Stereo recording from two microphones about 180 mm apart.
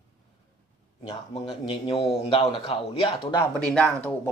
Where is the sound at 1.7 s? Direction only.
30° left (ahead or behind).